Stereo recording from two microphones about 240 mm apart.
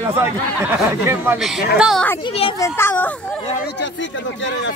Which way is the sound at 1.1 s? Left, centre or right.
Centre.